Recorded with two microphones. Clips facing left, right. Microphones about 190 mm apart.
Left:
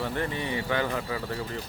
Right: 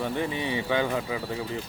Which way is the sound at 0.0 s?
15° right (ahead or behind).